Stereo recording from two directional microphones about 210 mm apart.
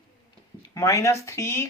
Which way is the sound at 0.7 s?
15° left (ahead or behind).